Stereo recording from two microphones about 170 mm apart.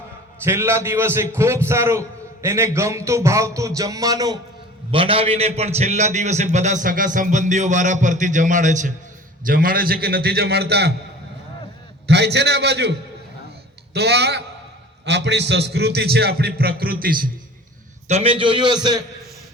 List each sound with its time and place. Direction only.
0.4 s a man's voice: 15° right (ahead or behind)
4.9 s a man's voice: 30° right (ahead or behind); by 10.9 s 70° right (ahead or behind)
12.0 s a man's voice: 80° right
15.0 s a man's voice: 90° right; by 17.3 s 60° right (ahead or behind)
18.1 s a man's voice: 35° right (ahead or behind)